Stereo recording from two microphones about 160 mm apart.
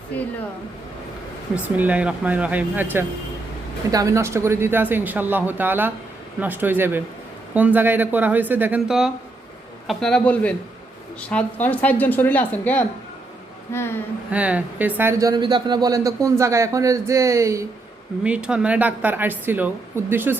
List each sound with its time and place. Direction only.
1.5 s a man's voice: 10° right (ahead or behind); by 14.0 s 15° left (ahead or behind)
14.3 s speech: 10° right (ahead or behind)
18.2 s speech: 5° right (ahead or behind)